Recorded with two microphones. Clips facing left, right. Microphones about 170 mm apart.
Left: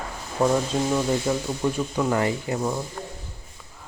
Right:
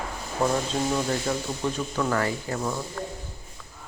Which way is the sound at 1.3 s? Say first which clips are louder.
Left 3 dB; 5° left (ahead or behind).